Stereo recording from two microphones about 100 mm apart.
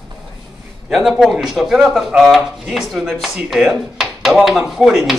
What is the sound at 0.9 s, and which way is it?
Speech, 5° right (ahead or behind).